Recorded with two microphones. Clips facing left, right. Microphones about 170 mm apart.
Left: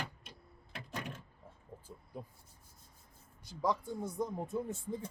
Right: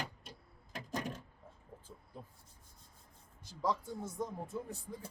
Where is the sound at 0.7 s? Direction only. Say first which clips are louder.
Right 3 dB; 40° right (ahead or behind).